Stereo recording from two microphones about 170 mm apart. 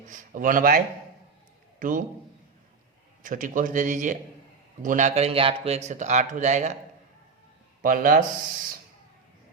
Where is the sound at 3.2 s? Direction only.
50° right (ahead or behind); by 5.8 s 35° right (ahead or behind).